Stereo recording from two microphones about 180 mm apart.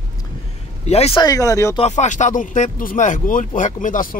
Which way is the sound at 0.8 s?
35° left (ahead or behind).